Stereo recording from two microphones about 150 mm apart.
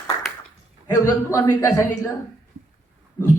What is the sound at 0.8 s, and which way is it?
Speech, 20° left (ahead or behind).